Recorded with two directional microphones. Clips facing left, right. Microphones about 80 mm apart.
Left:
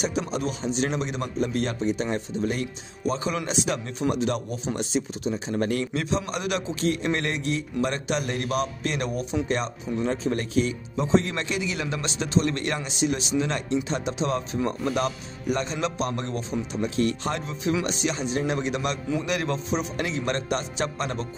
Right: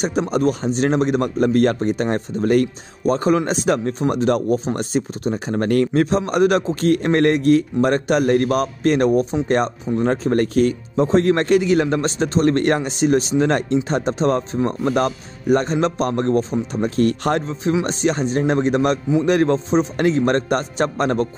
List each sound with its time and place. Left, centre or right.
0.0 s speech: right
17.8 s speech: right